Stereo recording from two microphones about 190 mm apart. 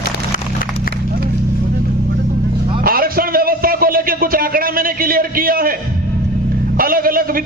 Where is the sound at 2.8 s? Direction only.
50° right (ahead or behind).